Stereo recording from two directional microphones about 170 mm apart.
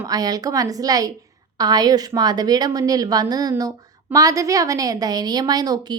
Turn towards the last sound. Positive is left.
turn(degrees=-20)  # may be behind; listen again after turning